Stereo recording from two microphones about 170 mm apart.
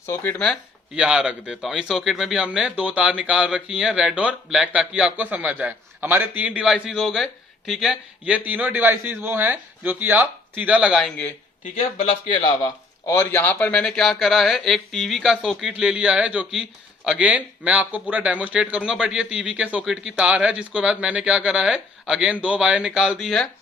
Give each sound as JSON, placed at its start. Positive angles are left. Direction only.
{"t": 0.0, "sound": "speech", "side_deg": 15}
{"t": 0.9, "sound": "a man's voice", "side_deg": -5}
{"t": 11.8, "sound": "speech", "side_deg": 30}
{"t": 13.1, "sound": "speech", "side_deg": 15}